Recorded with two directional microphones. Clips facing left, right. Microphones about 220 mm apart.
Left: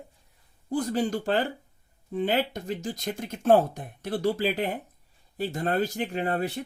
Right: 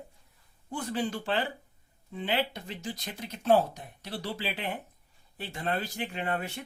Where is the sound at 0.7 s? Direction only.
40° left (ahead or behind).